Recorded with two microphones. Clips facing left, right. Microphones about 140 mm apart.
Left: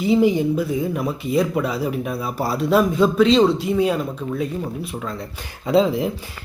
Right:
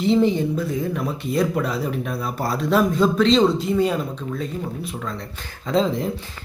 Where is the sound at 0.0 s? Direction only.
5° left (ahead or behind).